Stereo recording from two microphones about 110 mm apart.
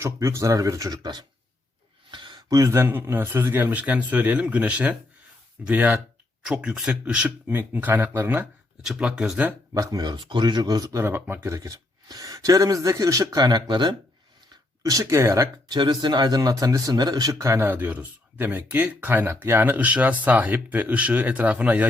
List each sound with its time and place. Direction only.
0.0 s speech: 25° right (ahead or behind)
8.8 s speech: 5° right (ahead or behind)
9.7 s speech: 35° right (ahead or behind)
11.0 s speech: 20° right (ahead or behind); by 13.9 s 45° right (ahead or behind)
14.8 s speech: 30° right (ahead or behind)
15.7 s speech: 40° right (ahead or behind); by 21.8 s 15° right (ahead or behind)